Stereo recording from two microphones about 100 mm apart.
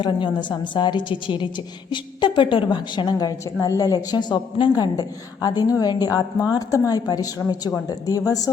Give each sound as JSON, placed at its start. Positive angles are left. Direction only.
{"t": 0.0, "sound": "a woman's voice", "side_deg": 50}